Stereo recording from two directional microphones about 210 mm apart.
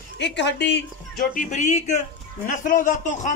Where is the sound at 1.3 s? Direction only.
35° left (ahead or behind).